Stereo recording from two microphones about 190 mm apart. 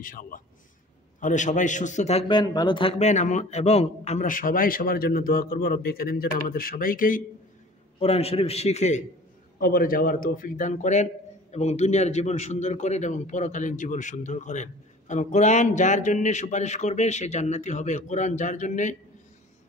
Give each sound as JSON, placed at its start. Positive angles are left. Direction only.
{"t": 0.0, "sound": "a man's voice", "side_deg": 45}
{"t": 8.0, "sound": "a man's voice", "side_deg": 30}
{"t": 9.6, "sound": "a man's voice", "side_deg": 50}